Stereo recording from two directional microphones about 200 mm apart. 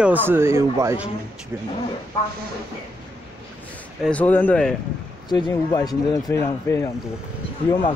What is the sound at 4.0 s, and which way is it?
Speech, 5° left (ahead or behind).